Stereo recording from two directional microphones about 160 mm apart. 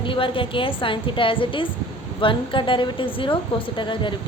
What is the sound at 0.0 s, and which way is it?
A woman's voice, 30° left (ahead or behind).